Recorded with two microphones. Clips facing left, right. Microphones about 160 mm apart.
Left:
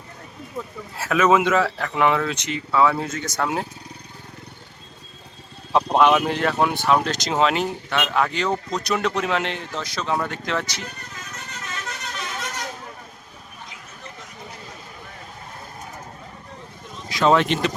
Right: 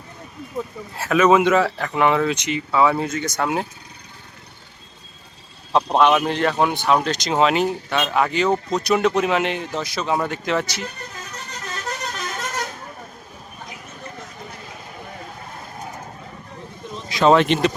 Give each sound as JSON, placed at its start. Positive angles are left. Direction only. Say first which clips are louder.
{"t": 0.9, "sound": "speech", "louder": "right 3 dB", "side_deg": 5}
{"t": 2.2, "sound": "speech", "louder": "right 4 dB", "side_deg": -15}
{"t": 3.4, "sound": "speech", "louder": "right 1 dB", "side_deg": 0}
{"t": 5.7, "sound": "speech", "louder": "right 1 dB", "side_deg": 10}
{"t": 11.3, "sound": "vehicle", "louder": "even", "side_deg": -35}
{"t": 17.1, "sound": "speech", "louder": "right 3 dB", "side_deg": -25}